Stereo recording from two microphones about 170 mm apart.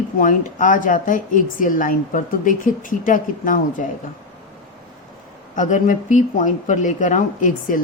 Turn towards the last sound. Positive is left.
turn(degrees=50)  # may be behind; listen again after turning